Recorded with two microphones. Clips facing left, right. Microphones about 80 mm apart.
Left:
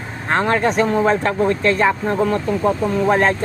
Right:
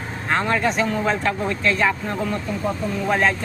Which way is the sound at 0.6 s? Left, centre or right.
Left.